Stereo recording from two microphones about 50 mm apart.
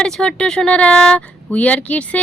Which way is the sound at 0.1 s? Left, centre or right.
Centre.